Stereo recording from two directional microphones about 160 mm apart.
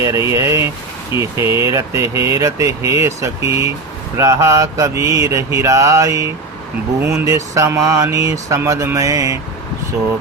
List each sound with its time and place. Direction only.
0.0 s speech: 20° right (ahead or behind)